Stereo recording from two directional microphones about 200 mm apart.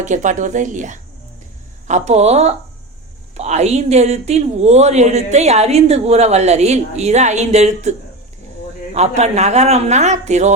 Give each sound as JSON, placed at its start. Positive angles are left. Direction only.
{"t": 0.0, "sound": "speech", "side_deg": -40}